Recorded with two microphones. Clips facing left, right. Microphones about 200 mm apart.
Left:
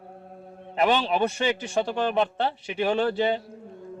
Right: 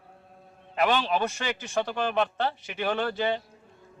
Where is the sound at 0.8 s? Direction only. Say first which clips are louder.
Left 2 dB; 30° left (ahead or behind).